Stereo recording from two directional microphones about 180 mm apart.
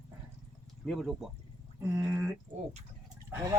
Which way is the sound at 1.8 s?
15° right (ahead or behind).